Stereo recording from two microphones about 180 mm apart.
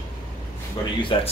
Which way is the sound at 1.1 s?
30° left (ahead or behind).